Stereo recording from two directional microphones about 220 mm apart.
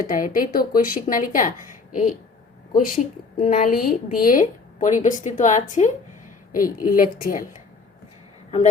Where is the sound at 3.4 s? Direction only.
40° left (ahead or behind).